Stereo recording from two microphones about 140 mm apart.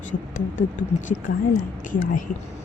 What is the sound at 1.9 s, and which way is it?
Speech, 75° left (ahead or behind).